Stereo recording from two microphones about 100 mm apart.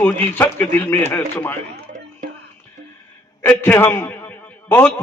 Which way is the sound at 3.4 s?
20° left (ahead or behind).